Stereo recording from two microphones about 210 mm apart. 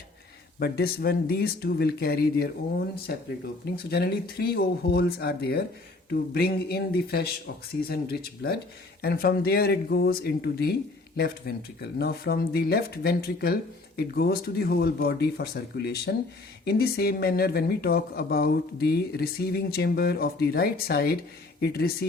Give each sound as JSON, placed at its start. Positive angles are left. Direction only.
{"t": 0.6, "sound": "speech", "side_deg": 45}